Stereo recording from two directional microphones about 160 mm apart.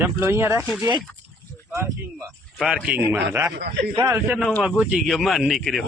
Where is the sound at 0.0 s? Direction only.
15° right (ahead or behind).